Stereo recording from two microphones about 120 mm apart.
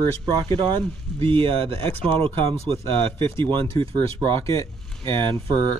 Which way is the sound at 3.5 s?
45° right (ahead or behind).